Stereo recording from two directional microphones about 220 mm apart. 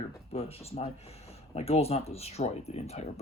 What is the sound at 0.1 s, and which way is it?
Speech, 25° left (ahead or behind).